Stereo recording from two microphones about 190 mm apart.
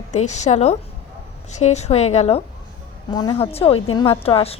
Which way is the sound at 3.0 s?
20° left (ahead or behind).